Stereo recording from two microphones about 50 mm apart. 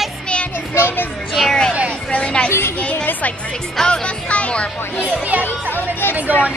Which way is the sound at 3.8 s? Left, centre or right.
Left.